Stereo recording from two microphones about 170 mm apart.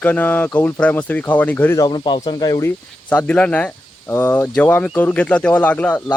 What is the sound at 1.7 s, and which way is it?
Speech, 25° left (ahead or behind).